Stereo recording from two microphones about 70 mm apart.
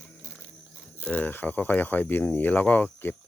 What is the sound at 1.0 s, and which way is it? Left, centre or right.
Speech, left.